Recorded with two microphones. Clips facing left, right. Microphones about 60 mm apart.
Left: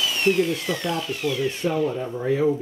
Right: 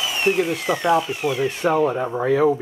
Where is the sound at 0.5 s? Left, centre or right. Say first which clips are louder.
Right 7 dB; centre.